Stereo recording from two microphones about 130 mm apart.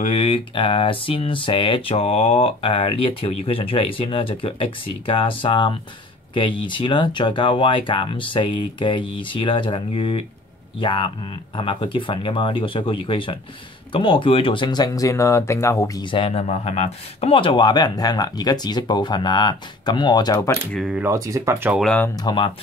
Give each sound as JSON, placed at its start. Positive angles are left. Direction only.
{"t": 0.0, "sound": "speech", "side_deg": 50}
{"t": 16.1, "sound": "speech", "side_deg": 45}
{"t": 21.1, "sound": "speech", "side_deg": -20}
{"t": 22.1, "sound": "speech", "side_deg": 35}